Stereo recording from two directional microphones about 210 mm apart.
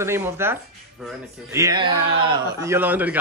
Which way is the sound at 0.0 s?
10° right (ahead or behind).